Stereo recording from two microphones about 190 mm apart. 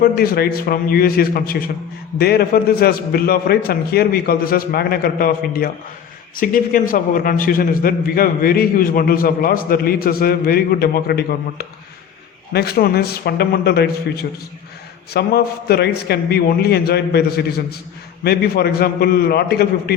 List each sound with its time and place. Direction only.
0.0 s a man's voice: 50° left (ahead or behind)
15.1 s a man's voice: 55° left (ahead or behind)